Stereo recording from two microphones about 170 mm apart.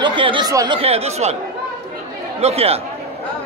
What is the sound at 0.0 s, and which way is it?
Speech, 30° right (ahead or behind).